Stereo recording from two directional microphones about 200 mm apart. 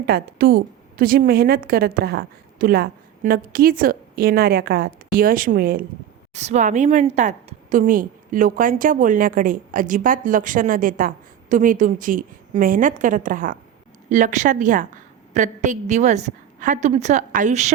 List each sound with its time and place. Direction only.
0.0 s a woman's voice: 50° right (ahead or behind)
6.3 s a woman's voice: 35° right (ahead or behind)